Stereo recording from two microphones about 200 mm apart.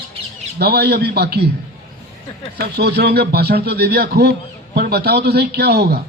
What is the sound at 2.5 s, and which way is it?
A man's voice, 55° right (ahead or behind).